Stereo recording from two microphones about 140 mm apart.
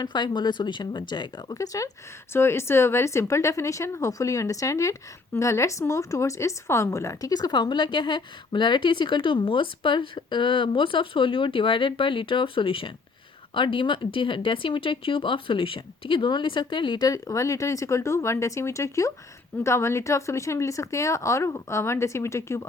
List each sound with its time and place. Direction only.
0.0 s a woman's voice: 30° left (ahead or behind)